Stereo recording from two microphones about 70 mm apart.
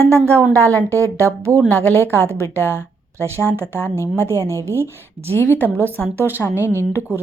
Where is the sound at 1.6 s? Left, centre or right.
Left.